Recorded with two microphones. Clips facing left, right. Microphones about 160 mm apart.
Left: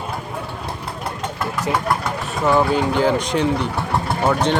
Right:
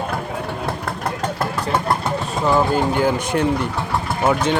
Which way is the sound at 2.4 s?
Centre (ahead or behind).